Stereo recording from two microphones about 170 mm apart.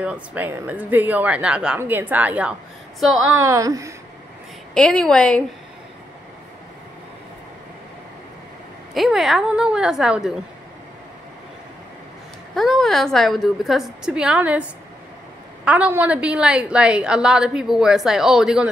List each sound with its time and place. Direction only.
0.0 s a woman's voice: 10° right (ahead or behind)
4.7 s a woman's voice: 5° left (ahead or behind)
8.9 s a woman's voice: centre (ahead or behind)
12.5 s a woman's voice: centre (ahead or behind)